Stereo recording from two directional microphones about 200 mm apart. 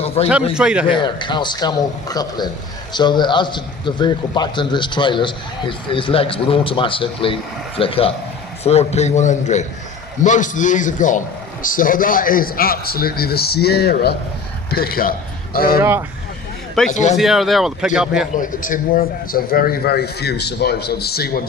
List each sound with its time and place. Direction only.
0.2 s a man's voice: 30° left (ahead or behind)
0.5 s speech: 5° right (ahead or behind)
0.9 s a man's voice: 25° left (ahead or behind); by 15.8 s 50° left (ahead or behind)
15.8 s speech: 10° right (ahead or behind)
16.9 s a man's voice: 35° left (ahead or behind)
17.2 s speech: centre (ahead or behind)
18.3 s a man's voice: 40° left (ahead or behind)